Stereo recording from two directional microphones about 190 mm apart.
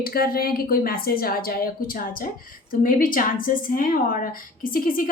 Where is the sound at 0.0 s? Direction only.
50° left (ahead or behind).